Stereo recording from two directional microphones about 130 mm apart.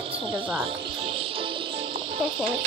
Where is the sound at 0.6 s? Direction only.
40° right (ahead or behind).